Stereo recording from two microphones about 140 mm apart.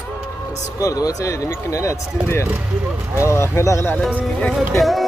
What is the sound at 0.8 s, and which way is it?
Speech, 25° left (ahead or behind).